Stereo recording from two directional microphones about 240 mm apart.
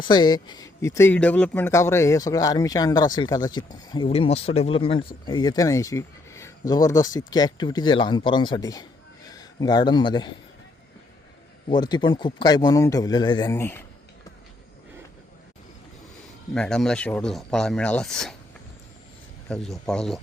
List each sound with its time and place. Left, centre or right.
0.0 s speech: centre
11.7 s speech: centre
16.6 s speech: centre
19.5 s speech: centre